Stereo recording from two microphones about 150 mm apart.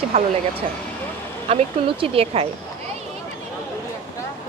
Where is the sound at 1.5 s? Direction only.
40° right (ahead or behind).